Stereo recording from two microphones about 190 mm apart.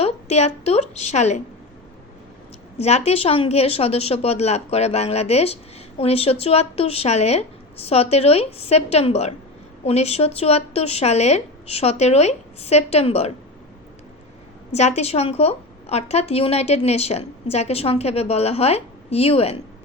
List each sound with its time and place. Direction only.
0.0 s a woman's voice: 35° left (ahead or behind)
2.7 s a woman's voice: 35° left (ahead or behind)
14.7 s a woman's voice: 35° left (ahead or behind)